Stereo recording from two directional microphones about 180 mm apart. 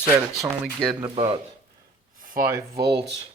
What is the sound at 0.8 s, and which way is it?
Speech, 25° right (ahead or behind).